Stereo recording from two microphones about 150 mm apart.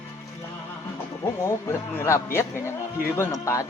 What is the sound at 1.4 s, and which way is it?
Speech, 20° left (ahead or behind).